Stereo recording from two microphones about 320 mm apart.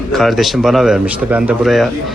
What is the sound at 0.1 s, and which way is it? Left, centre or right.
A man's voice, centre.